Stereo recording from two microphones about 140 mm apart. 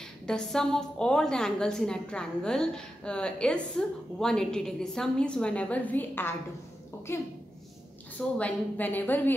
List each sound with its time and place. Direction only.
0.3 s a woman's voice: 5° left (ahead or behind)
8.4 s a woman's voice: 10° left (ahead or behind)